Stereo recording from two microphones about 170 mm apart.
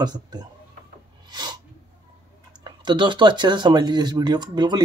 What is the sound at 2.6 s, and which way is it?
Speech, 25° right (ahead or behind).